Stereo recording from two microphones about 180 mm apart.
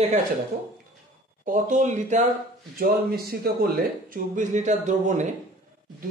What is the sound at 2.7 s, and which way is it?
Speech, 55° right (ahead or behind).